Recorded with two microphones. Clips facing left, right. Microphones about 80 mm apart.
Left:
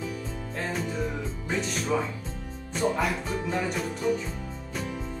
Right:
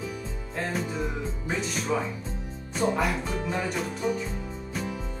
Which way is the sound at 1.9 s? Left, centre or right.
Centre.